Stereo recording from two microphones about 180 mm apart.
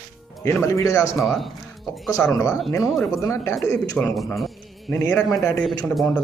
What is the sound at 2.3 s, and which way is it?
Speech, 20° left (ahead or behind).